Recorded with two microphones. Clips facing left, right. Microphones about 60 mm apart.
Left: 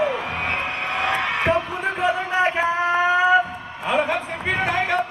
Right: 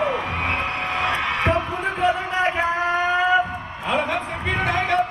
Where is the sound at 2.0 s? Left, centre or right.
Centre.